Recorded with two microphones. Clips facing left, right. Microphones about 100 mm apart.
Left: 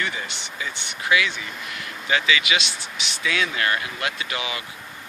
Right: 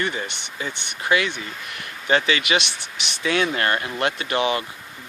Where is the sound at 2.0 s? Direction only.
45° right (ahead or behind).